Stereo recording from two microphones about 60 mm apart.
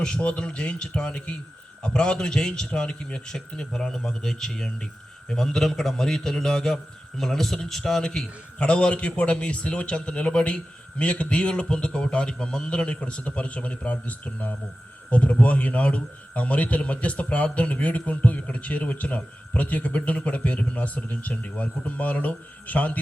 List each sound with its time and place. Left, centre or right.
0.0 s a man's voice: centre